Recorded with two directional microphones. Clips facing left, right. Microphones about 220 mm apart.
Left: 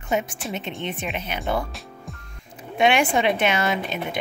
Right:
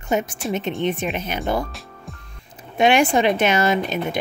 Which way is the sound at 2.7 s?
40° right (ahead or behind).